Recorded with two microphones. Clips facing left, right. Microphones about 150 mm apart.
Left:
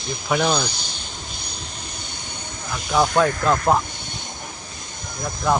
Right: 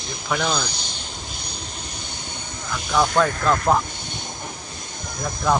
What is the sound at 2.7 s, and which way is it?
Speech, 15° left (ahead or behind).